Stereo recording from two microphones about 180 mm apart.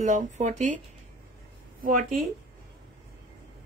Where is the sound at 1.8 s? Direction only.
50° right (ahead or behind).